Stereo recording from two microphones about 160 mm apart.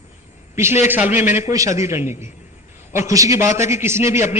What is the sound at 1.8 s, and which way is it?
Speech, 15° right (ahead or behind).